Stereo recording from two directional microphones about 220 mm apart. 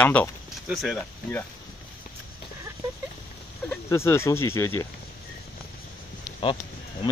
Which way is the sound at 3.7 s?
10° left (ahead or behind).